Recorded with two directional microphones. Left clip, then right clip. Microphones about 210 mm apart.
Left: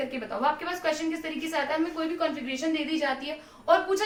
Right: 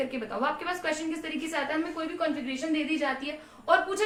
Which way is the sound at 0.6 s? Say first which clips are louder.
Left 2 dB; 15° right (ahead or behind).